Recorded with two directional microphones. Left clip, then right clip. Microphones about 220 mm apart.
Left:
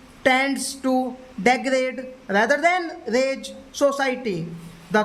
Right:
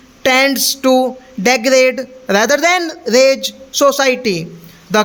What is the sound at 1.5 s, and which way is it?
A man's voice, 40° right (ahead or behind).